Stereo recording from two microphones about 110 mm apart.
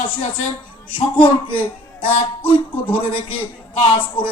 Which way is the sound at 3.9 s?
55° left (ahead or behind).